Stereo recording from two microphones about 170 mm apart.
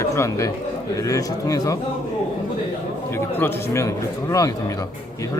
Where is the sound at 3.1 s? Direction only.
15° left (ahead or behind).